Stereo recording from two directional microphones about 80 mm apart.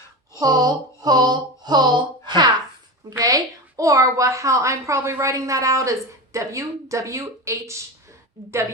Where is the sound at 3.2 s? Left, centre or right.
Right.